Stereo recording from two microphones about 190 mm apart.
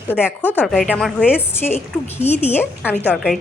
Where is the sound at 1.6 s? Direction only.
35° left (ahead or behind).